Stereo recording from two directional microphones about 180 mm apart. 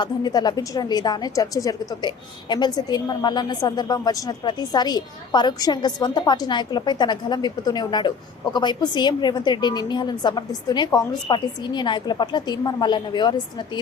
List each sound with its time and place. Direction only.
0.0 s a woman's voice: 20° left (ahead or behind)